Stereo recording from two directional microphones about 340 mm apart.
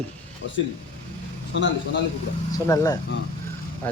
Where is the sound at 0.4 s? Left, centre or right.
Left.